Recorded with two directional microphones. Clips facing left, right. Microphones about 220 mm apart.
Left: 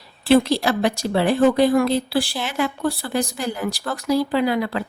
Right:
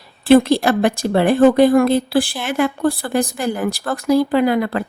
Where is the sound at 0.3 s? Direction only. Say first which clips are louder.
Right 5 dB; 50° right (ahead or behind).